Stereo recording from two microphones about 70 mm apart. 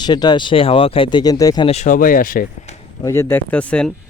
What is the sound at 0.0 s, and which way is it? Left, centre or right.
Speech, left.